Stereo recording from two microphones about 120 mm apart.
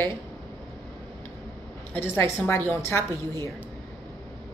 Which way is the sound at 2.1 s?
15° left (ahead or behind).